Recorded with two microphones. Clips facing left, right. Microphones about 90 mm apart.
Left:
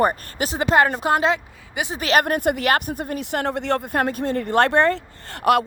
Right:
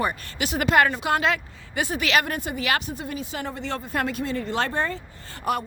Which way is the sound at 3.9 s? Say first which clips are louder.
Left 4 dB; 45° left (ahead or behind).